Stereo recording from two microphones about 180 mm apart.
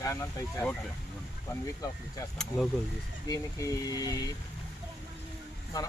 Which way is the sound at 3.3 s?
20° left (ahead or behind).